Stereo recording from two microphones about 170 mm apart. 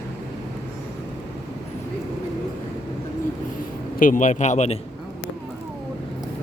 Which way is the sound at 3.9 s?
50° left (ahead or behind).